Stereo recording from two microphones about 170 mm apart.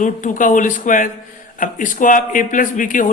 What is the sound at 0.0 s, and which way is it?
A man's voice, 50° left (ahead or behind).